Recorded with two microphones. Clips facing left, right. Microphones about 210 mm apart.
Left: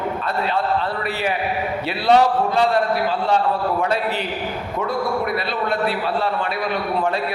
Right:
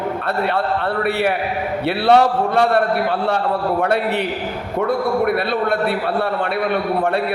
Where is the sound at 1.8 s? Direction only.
60° right (ahead or behind).